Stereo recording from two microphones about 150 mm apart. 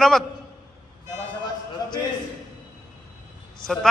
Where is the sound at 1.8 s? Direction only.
25° left (ahead or behind).